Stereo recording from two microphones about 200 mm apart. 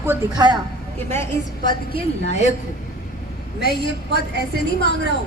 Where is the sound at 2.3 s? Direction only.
35° left (ahead or behind).